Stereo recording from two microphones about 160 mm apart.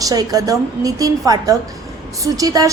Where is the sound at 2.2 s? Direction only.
20° right (ahead or behind).